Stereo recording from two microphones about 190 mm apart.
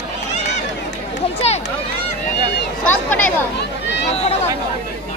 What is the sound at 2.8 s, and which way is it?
Speech, 10° left (ahead or behind).